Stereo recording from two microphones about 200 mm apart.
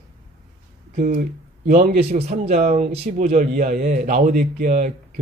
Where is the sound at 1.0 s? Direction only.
45° right (ahead or behind).